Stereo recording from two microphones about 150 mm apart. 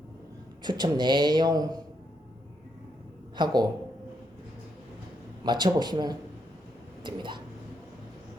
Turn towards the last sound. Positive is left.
turn(degrees=-30)  # may be behind; listen again after turning